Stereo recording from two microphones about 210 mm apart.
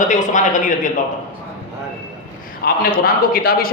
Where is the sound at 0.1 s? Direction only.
35° left (ahead or behind).